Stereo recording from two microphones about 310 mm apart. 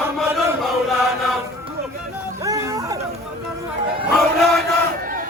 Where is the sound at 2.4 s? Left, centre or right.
Centre.